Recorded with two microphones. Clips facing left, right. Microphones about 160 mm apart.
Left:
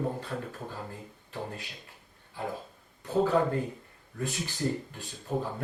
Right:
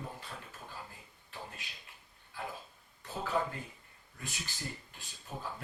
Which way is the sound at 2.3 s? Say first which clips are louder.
Left 7 dB; 20° left (ahead or behind).